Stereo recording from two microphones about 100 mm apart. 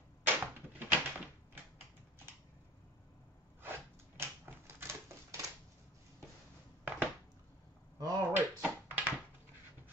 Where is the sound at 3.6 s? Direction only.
20° right (ahead or behind).